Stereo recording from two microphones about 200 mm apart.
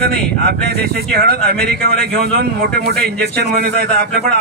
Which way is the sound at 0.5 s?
50° right (ahead or behind).